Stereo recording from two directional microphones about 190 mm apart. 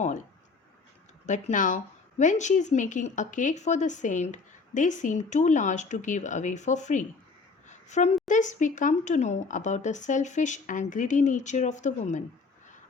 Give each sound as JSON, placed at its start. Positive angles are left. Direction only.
{"t": 1.3, "sound": "speech", "side_deg": 40}
{"t": 7.7, "sound": "a sound", "side_deg": 40}
{"t": 8.3, "sound": "speech", "side_deg": 40}